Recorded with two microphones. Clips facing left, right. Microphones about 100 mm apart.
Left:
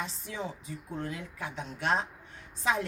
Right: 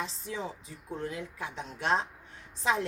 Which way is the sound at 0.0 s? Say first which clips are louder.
Right 1 dB; 30° right (ahead or behind).